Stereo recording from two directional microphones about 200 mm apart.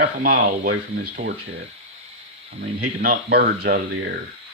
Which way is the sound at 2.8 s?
45° right (ahead or behind).